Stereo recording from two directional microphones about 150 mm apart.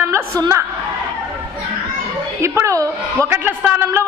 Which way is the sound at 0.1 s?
20° right (ahead or behind).